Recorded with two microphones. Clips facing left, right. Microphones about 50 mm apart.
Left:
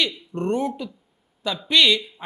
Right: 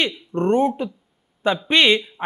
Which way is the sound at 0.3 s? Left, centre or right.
Right.